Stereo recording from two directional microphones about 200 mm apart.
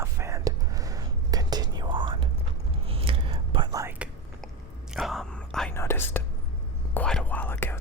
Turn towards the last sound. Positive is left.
turn(degrees=10)  # may be behind; listen again after turning